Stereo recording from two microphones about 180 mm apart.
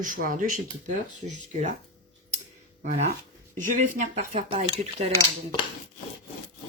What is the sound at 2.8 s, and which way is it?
Speech, 50° right (ahead or behind).